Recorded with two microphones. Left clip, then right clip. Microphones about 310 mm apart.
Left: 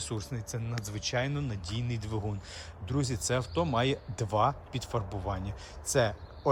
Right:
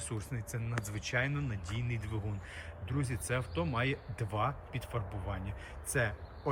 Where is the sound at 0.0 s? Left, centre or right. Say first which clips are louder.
Left 5 dB; centre.